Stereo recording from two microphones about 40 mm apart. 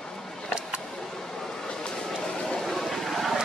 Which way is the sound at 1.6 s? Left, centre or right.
Centre.